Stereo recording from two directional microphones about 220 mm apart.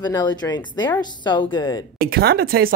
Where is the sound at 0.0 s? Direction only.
15° left (ahead or behind).